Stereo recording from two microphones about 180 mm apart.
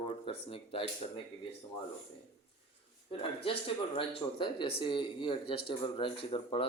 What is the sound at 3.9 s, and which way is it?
Speech, 30° left (ahead or behind).